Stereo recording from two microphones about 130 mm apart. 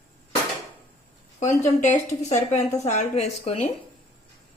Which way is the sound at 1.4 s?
65° left (ahead or behind).